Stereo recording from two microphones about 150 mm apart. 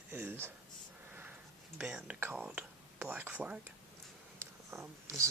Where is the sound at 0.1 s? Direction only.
15° right (ahead or behind).